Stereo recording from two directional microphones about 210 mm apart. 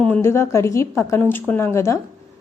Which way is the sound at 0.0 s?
10° left (ahead or behind).